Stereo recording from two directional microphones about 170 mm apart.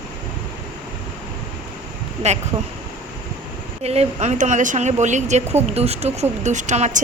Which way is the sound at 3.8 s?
40° right (ahead or behind).